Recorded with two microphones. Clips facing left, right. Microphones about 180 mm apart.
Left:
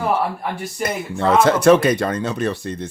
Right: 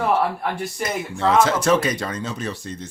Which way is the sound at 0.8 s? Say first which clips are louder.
Left 4 dB; 55° left (ahead or behind).